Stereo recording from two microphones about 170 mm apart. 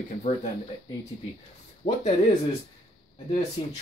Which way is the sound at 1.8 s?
40° left (ahead or behind).